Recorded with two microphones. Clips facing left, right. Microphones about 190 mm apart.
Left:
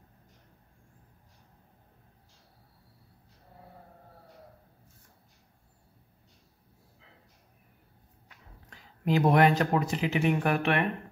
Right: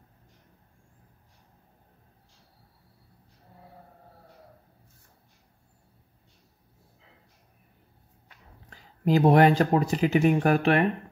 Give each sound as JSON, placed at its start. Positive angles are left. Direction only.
{"t": 8.6, "sound": "speech", "side_deg": -35}